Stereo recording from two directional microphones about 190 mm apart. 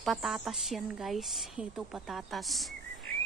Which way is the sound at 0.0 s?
Centre (ahead or behind).